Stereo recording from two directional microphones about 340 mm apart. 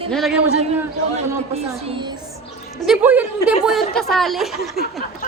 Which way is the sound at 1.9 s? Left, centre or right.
Centre.